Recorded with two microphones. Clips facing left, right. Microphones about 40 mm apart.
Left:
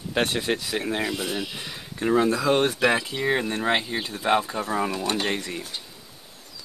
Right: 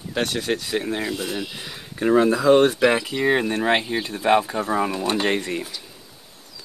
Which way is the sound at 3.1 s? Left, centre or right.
Centre.